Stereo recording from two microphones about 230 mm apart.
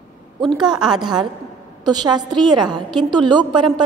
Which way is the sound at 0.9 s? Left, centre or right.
Centre.